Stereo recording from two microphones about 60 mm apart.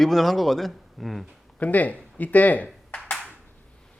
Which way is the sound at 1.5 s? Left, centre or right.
Left.